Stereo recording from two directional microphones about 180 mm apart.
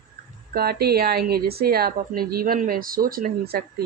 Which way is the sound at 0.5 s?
60° right (ahead or behind).